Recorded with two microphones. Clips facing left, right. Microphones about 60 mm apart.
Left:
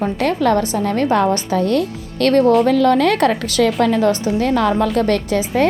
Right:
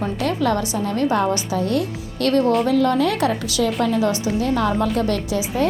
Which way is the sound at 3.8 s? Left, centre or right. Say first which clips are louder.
Left 4 dB; left.